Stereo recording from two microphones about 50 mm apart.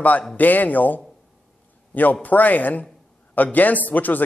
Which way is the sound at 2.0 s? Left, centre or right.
Left.